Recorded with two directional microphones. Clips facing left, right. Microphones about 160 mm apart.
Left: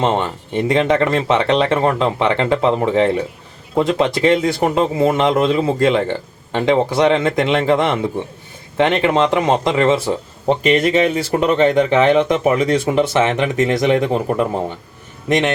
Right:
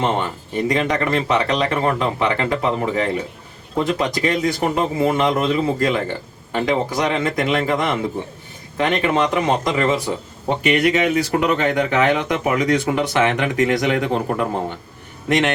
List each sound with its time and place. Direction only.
0.0 s speech: 25° left (ahead or behind)
8.8 s speech: 25° left (ahead or behind)